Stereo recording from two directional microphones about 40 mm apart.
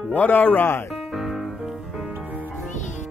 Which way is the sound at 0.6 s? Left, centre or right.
Left.